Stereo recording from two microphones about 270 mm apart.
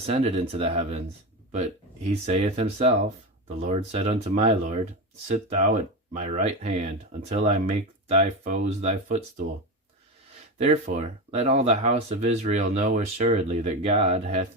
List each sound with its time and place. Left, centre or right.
0.0 s speech: right
2.2 s speech: right
10.6 s speech: right